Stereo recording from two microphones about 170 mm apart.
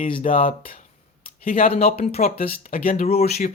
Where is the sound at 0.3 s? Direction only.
50° left (ahead or behind).